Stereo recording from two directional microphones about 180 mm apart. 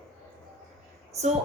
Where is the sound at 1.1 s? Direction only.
35° right (ahead or behind).